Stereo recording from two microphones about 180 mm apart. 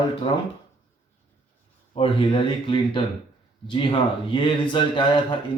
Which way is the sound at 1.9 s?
30° left (ahead or behind).